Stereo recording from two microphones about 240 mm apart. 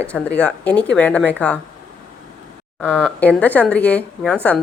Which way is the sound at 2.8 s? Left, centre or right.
Centre.